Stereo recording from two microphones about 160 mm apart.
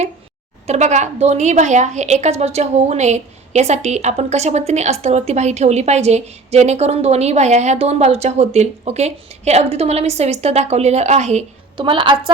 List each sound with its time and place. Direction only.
0.7 s a woman's voice: 45° right (ahead or behind)
11.8 s a woman's voice: 30° right (ahead or behind)